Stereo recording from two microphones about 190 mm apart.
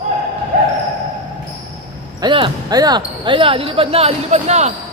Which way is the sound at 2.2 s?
25° right (ahead or behind).